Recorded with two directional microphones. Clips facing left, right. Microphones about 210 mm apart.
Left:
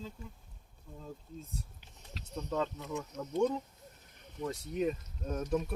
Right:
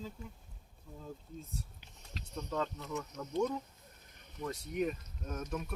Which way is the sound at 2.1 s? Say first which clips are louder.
Left 2 dB; 5° left (ahead or behind).